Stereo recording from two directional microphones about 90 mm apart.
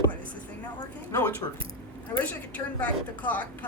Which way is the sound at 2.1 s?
20° left (ahead or behind).